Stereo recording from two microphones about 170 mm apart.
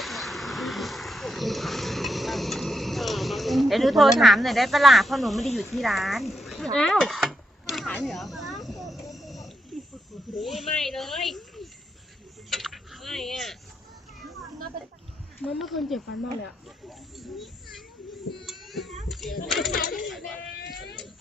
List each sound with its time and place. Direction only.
0.0 s vehicle: centre (ahead or behind)
5.7 s speech: centre (ahead or behind)
6.7 s a sound: 5° left (ahead or behind)
10.3 s speech: centre (ahead or behind)
12.5 s a sound: centre (ahead or behind)
15.4 s speech: centre (ahead or behind)
17.2 s a child's voice: centre (ahead or behind)
18.4 s child singing: centre (ahead or behind)
19.0 s a sound: centre (ahead or behind)
19.5 s speech: centre (ahead or behind)
19.7 s a sound: 55° left (ahead or behind)
20.1 s baby cry: centre (ahead or behind)